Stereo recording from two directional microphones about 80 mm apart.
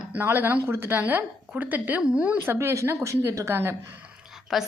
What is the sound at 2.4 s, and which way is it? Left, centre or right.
A woman's voice, right.